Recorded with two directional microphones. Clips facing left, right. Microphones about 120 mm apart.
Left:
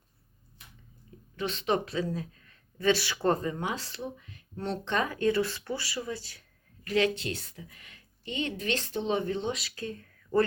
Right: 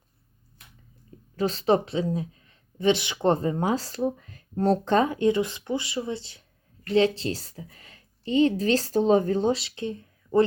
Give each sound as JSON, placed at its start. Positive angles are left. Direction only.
{"t": 1.4, "sound": "speech", "side_deg": -35}
{"t": 5.0, "sound": "a woman's voice", "side_deg": -20}
{"t": 9.6, "sound": "speech", "side_deg": -25}